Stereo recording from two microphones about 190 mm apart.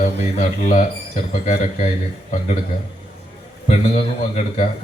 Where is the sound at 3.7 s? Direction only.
35° left (ahead or behind).